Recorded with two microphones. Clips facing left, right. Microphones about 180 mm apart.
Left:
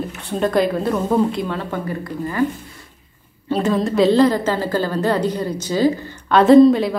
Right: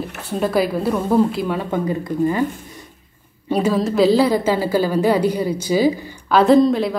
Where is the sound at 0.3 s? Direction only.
5° right (ahead or behind).